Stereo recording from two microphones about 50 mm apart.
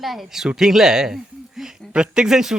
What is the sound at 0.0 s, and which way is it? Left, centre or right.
A woman's voice, centre.